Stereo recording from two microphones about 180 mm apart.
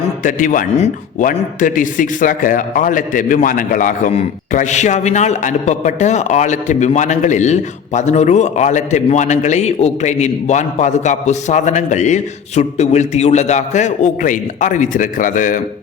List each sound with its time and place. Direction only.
0.2 s a man's voice: 45° left (ahead or behind)